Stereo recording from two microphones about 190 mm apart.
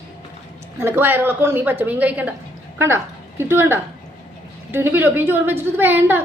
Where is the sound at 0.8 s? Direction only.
10° right (ahead or behind).